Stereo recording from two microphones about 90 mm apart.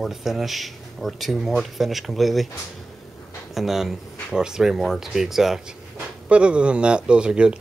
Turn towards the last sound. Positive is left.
turn(degrees=-10)  # may be behind; listen again after turning